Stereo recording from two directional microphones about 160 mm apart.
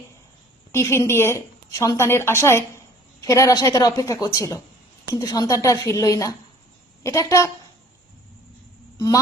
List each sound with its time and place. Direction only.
0.7 s a woman's voice: 15° left (ahead or behind)
9.0 s speech: 20° left (ahead or behind)